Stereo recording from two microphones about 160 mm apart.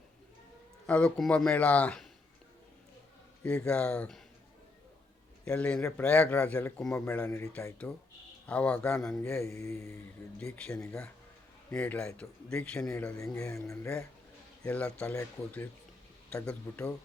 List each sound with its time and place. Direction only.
0.9 s speech: 5° left (ahead or behind)
3.6 s speech: 10° left (ahead or behind)
5.5 s speech: 5° left (ahead or behind)
9.4 s speech: 15° left (ahead or behind)
10.4 s speech: 5° left (ahead or behind)
13.1 s speech: 20° left (ahead or behind)